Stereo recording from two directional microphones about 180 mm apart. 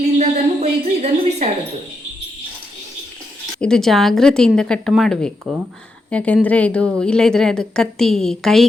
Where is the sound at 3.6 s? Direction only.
5° left (ahead or behind).